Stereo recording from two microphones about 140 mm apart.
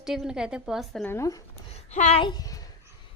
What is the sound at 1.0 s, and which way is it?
Speech, 20° left (ahead or behind).